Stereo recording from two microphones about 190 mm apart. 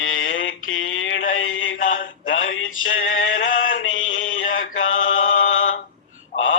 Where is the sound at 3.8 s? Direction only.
90° left.